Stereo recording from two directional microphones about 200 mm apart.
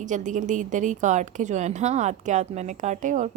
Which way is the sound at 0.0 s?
40° right (ahead or behind).